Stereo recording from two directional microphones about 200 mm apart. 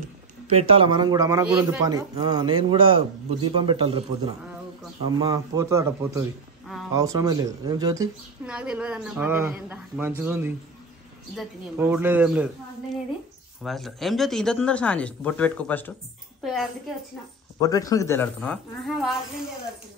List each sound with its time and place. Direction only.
0.5 s a man's voice: 30° right (ahead or behind)
8.5 s speech: 5° right (ahead or behind)
11.7 s speech: 10° right (ahead or behind)
13.6 s speech: centre (ahead or behind)
17.6 s a woman's voice: 15° left (ahead or behind); by 19.1 s centre (ahead or behind)